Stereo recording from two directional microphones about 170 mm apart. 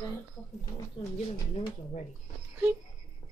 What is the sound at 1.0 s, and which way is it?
Speech, 30° left (ahead or behind).